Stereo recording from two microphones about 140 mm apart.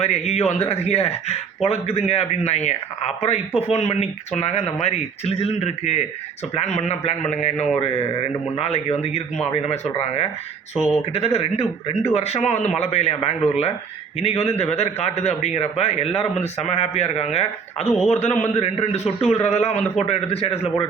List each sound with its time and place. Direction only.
0.0 s a man's voice: 50° left (ahead or behind)
10.8 s a man's voice: 50° left (ahead or behind)